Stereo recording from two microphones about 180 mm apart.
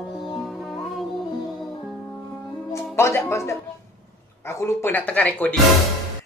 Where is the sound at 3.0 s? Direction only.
15° left (ahead or behind).